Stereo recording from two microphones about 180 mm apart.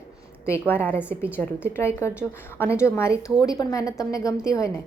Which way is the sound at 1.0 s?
10° right (ahead or behind).